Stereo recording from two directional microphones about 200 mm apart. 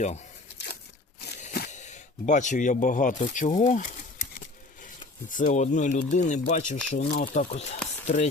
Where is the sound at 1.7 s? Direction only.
35° left (ahead or behind).